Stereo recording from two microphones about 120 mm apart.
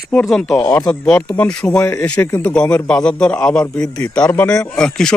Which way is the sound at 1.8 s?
25° left (ahead or behind).